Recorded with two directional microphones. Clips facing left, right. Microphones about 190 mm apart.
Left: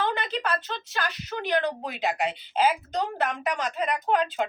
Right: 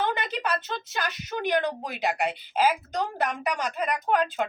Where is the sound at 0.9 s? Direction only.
15° right (ahead or behind).